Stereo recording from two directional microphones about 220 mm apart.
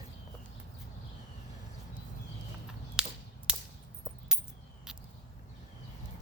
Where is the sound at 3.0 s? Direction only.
5° right (ahead or behind).